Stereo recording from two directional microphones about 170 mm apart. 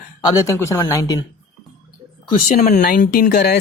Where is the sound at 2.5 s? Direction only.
45° left (ahead or behind).